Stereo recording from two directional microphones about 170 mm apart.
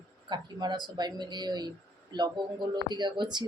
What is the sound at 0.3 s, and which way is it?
Speech, 25° right (ahead or behind).